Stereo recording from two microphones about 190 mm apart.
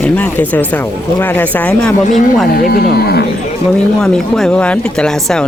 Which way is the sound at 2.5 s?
50° left (ahead or behind).